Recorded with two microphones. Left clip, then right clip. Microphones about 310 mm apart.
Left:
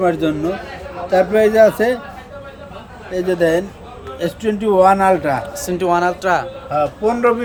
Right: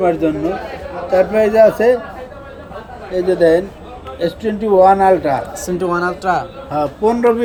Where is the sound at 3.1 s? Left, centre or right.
Left.